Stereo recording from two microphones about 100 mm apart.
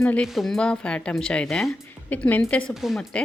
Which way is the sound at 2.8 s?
Centre (ahead or behind).